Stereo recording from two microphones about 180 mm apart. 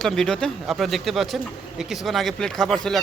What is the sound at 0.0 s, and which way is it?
Speech, 5° left (ahead or behind).